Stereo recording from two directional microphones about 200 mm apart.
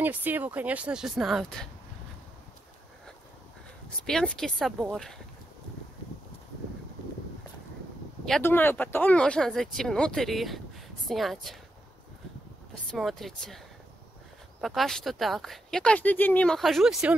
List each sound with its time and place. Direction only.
0.0 s speech: 10° right (ahead or behind)
4.0 s speech: 5° left (ahead or behind)
8.3 s speech: 10° left (ahead or behind)
12.9 s speech: centre (ahead or behind)
14.6 s speech: centre (ahead or behind)